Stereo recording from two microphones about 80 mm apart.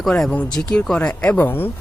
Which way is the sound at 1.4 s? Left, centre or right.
Left.